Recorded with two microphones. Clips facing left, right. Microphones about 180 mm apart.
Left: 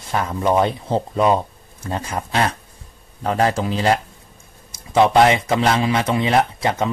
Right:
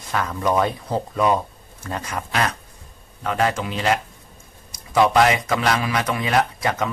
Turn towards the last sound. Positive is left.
turn(degrees=25)  # may be behind; listen again after turning